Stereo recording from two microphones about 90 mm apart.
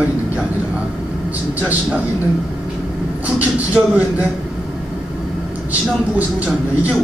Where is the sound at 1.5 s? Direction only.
20° right (ahead or behind).